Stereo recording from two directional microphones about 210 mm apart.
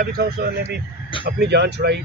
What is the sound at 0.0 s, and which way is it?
Speech, 45° right (ahead or behind).